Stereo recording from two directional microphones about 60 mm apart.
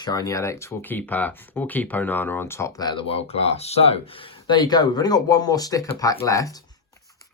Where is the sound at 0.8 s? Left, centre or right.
Left.